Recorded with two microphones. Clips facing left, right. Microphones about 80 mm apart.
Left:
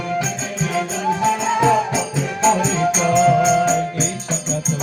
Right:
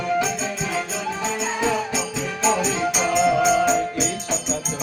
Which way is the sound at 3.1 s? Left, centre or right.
Centre.